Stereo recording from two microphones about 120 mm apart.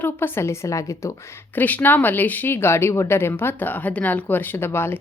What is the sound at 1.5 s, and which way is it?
Speech, 15° left (ahead or behind).